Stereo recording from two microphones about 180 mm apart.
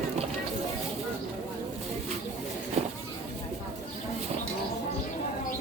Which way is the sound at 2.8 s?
35° right (ahead or behind).